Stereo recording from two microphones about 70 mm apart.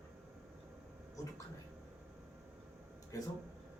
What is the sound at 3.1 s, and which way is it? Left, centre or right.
Speech, left.